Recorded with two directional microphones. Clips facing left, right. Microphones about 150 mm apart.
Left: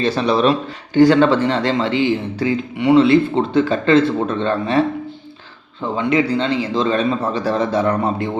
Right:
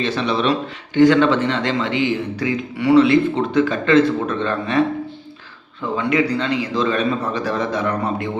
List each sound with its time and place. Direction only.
0.0 s speech: 35° left (ahead or behind)
6.0 s speech: 30° left (ahead or behind)